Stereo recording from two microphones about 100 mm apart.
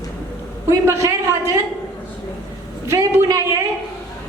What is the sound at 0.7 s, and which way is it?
Speech, 30° right (ahead or behind).